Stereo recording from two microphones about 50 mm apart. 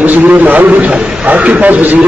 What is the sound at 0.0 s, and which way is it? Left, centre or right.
A man's voice, right.